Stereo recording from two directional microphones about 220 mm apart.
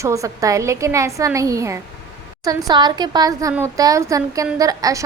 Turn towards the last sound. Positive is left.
turn(degrees=-15)  # may be behind; listen again after turning